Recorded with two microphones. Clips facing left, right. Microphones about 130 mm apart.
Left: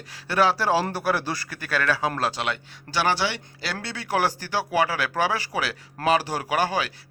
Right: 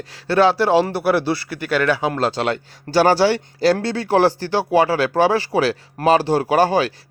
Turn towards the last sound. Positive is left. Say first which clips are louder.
# right 8 dB
turn(degrees=-30)  # may be behind; listen again after turning